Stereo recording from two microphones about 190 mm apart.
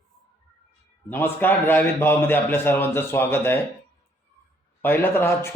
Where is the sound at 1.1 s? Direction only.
10° left (ahead or behind).